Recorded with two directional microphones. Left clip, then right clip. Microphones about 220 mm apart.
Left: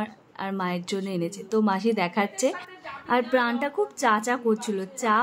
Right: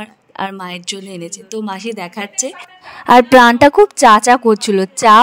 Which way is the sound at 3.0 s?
50° right (ahead or behind).